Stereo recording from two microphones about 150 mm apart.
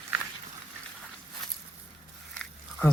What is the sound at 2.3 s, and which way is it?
Biting, 5° left (ahead or behind).